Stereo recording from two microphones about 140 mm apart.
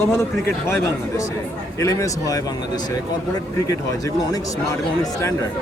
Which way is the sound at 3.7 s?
25° left (ahead or behind).